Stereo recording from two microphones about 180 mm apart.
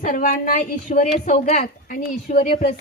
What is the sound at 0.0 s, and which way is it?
Speech, 50° left (ahead or behind).